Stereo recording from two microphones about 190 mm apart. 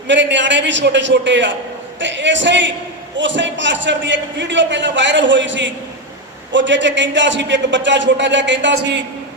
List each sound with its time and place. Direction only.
0.1 s a man's voice: 70° right (ahead or behind)